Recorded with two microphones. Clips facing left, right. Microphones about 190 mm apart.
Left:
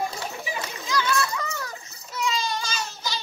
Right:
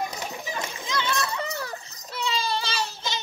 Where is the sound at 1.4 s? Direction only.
30° right (ahead or behind).